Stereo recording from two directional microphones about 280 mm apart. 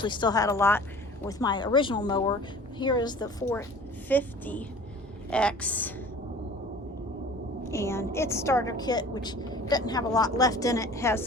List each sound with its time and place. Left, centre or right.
0.0 s a woman's voice: centre
7.7 s a woman's voice: centre